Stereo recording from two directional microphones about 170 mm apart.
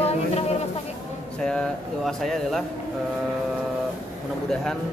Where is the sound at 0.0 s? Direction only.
35° left (ahead or behind).